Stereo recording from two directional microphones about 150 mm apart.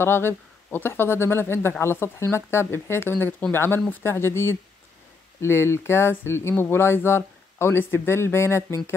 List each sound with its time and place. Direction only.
0.0 s speech: 15° left (ahead or behind)